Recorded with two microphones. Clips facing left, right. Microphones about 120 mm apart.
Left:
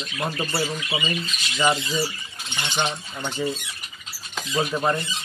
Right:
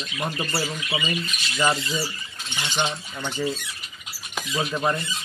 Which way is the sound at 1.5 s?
15° left (ahead or behind).